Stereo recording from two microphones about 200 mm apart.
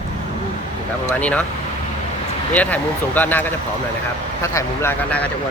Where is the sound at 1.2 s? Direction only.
5° left (ahead or behind).